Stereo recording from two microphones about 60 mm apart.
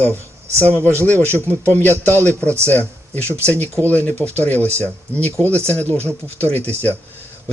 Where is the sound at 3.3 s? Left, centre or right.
Right.